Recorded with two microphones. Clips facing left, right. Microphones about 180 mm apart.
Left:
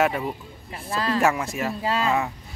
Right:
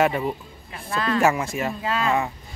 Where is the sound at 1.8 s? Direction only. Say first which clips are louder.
Left 3 dB; 30° left (ahead or behind).